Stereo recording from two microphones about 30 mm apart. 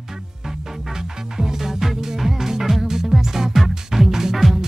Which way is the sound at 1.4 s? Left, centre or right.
Centre.